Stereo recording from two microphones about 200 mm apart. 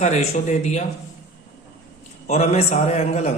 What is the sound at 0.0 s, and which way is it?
Speech, 35° left (ahead or behind).